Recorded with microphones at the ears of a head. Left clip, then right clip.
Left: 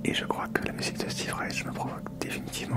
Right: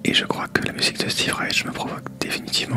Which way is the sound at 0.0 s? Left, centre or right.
Right.